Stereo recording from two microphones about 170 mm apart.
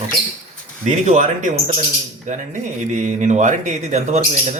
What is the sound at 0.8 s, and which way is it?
Speech, 45° right (ahead or behind).